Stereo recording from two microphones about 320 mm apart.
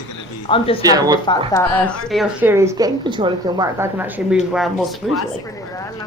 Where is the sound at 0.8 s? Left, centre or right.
Centre.